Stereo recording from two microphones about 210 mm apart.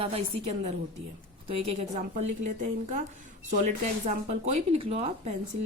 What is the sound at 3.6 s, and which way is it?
Speech, 35° right (ahead or behind).